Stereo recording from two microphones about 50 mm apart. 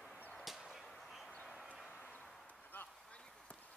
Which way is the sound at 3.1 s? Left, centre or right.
Left.